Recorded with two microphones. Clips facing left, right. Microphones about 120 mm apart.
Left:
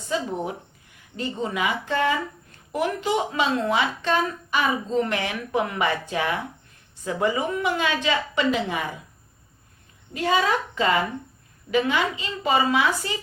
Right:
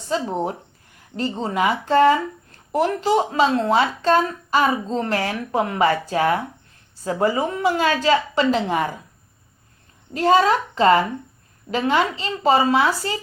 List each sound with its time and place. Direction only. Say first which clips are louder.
0.1 s a woman's voice: right 4 dB; 35° right (ahead or behind)
10.2 s a woman's voice: right 6 dB; 40° right (ahead or behind)
12.2 s a woman's voice: right 5 dB; 35° right (ahead or behind)